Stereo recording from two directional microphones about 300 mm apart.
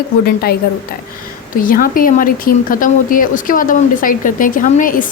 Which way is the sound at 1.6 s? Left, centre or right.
Left.